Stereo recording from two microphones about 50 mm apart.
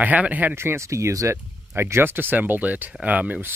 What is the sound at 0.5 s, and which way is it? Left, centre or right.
Speech, right.